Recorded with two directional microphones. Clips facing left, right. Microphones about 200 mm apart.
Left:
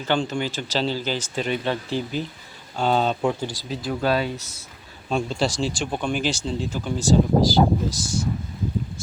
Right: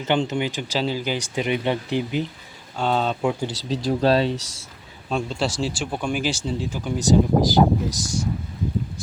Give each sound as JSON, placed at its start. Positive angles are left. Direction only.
{"t": 0.0, "sound": "speech", "side_deg": -20}
{"t": 2.7, "sound": "speech", "side_deg": 5}
{"t": 3.4, "sound": "speech", "side_deg": -75}
{"t": 3.8, "sound": "speech", "side_deg": -30}
{"t": 5.0, "sound": "speech", "side_deg": 0}